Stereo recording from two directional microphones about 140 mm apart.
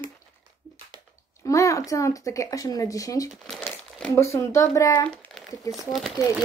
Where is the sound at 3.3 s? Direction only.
Centre (ahead or behind).